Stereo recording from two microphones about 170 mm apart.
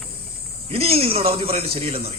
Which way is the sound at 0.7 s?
35° right (ahead or behind).